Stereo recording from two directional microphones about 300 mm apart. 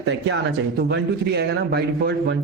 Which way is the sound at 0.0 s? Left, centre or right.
Right.